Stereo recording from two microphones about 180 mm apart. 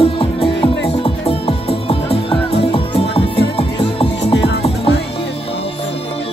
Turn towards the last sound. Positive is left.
turn(degrees=30)  # may be behind; listen again after turning